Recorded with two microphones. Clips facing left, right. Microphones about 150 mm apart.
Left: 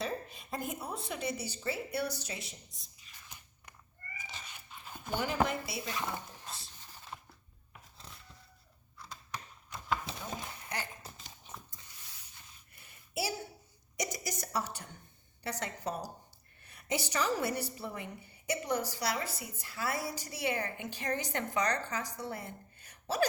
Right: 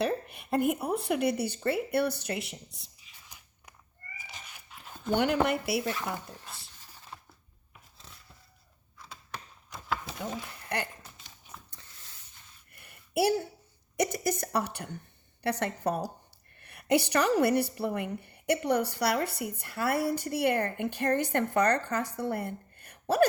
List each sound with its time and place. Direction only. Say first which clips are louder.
0.0 s a woman's voice: right 8 dB; 65° right (ahead or behind)
3.0 s a sound: left 5 dB; 5° right (ahead or behind)
4.3 s dog: right 1 dB; centre (ahead or behind)
5.1 s speech: right 6 dB; 70° right (ahead or behind)
12.7 s a sound: right 9 dB; 60° right (ahead or behind)
13.9 s a woman's voice: right 9 dB; 55° right (ahead or behind)